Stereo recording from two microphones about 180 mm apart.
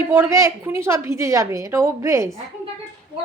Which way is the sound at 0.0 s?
15° right (ahead or behind).